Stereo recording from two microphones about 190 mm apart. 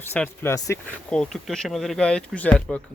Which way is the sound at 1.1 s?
Centre (ahead or behind).